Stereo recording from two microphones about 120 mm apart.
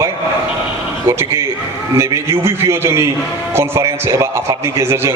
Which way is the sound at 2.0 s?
25° right (ahead or behind).